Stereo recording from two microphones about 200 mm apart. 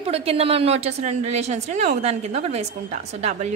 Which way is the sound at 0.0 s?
30° right (ahead or behind).